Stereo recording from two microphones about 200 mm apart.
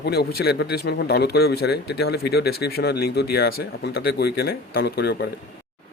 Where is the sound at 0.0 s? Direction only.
55° left (ahead or behind).